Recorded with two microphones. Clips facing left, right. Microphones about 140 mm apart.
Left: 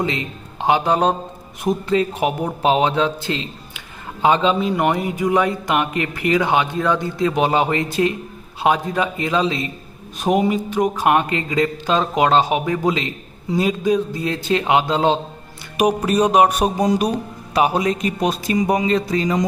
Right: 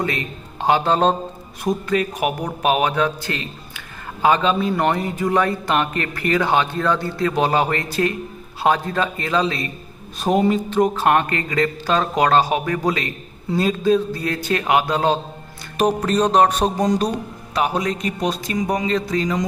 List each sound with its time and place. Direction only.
0.0 s a man's voice: 20° left (ahead or behind)
1.6 s a man's voice: 25° left (ahead or behind)
15.8 s a man's voice: 10° left (ahead or behind)